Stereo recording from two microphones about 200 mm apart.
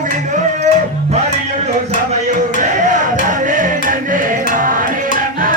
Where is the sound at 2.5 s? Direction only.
40° right (ahead or behind).